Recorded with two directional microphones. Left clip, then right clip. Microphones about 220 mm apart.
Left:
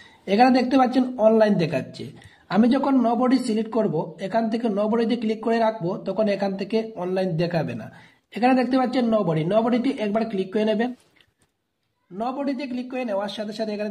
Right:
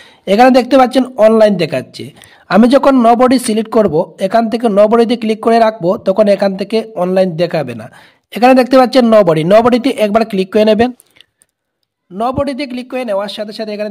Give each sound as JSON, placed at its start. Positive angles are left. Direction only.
{"t": 0.2, "sound": "speech", "side_deg": -35}
{"t": 12.2, "sound": "speech", "side_deg": -40}